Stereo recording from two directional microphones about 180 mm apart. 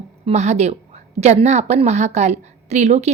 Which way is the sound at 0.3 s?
40° right (ahead or behind).